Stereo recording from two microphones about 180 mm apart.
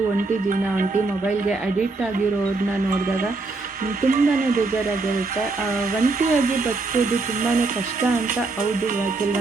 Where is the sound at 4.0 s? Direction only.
50° right (ahead or behind).